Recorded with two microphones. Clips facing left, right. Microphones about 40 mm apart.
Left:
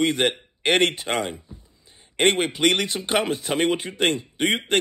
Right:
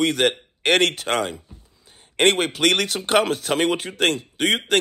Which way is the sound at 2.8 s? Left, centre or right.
Right.